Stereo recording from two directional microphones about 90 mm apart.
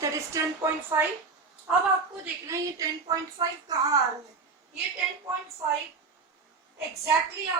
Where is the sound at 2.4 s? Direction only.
40° right (ahead or behind).